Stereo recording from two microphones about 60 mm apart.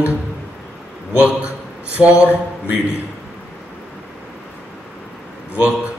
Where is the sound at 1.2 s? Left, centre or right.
Right.